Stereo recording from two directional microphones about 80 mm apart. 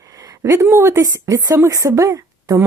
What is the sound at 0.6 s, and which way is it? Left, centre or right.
Speech, right.